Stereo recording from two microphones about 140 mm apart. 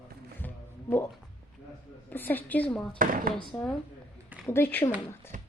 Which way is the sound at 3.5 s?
15° left (ahead or behind).